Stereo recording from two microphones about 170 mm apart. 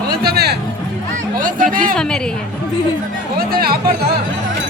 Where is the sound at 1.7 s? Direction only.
55° right (ahead or behind).